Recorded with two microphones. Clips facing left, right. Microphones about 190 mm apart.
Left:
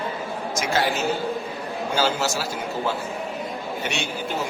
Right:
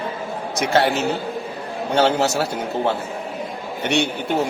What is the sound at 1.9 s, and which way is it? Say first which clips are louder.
A man's voice: right 6 dB; 65° right (ahead or behind).